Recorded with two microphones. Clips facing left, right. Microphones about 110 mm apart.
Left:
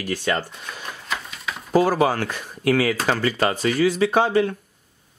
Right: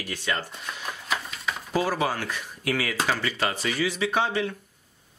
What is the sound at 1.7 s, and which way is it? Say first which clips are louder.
Speech: left 8 dB; 45° left (ahead or behind).